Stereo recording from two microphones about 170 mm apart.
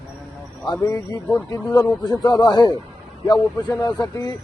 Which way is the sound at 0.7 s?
20° left (ahead or behind).